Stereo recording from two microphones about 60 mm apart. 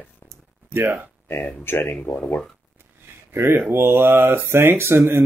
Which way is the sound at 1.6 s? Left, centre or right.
Left.